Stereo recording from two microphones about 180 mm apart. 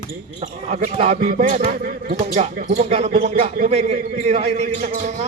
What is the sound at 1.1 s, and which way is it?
Speech, 50° right (ahead or behind).